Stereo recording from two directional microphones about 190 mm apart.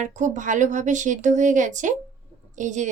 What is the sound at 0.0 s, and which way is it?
A woman's voice, 40° right (ahead or behind).